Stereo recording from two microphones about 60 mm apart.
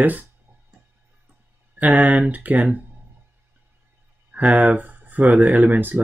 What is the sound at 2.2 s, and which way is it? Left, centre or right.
Speech, right.